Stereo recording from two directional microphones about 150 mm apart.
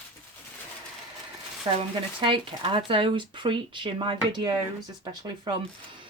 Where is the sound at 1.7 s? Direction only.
30° right (ahead or behind).